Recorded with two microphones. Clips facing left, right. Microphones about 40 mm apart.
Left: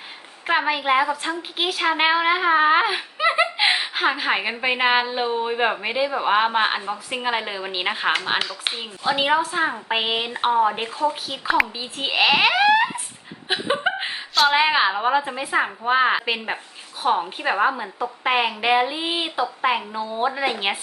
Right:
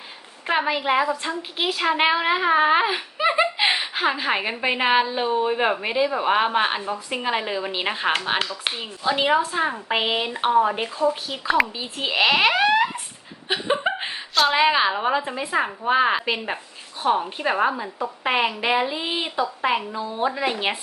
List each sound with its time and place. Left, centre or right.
0.4 s a woman's voice: centre
1.6 s a woman's voice: centre